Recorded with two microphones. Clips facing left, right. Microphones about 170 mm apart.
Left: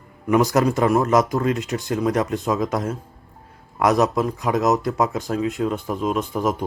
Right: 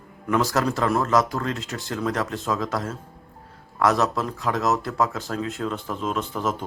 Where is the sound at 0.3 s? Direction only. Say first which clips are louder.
Left 5 dB; 15° left (ahead or behind).